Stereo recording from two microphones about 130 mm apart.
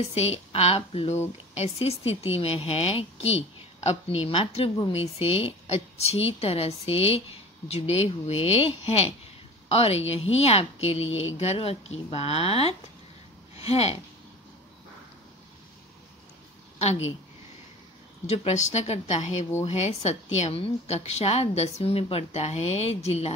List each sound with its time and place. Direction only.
0.1 s a woman's voice: 55° left (ahead or behind)
16.7 s a sound: 50° left (ahead or behind)
18.2 s a woman's voice: 60° left (ahead or behind)